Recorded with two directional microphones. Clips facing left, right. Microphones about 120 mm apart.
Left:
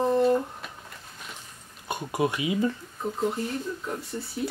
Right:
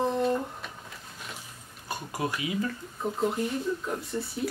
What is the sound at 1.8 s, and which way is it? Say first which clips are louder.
Speech: left 5 dB; 25° left (ahead or behind).